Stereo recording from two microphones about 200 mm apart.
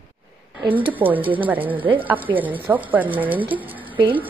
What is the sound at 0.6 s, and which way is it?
A woman's voice, 10° right (ahead or behind).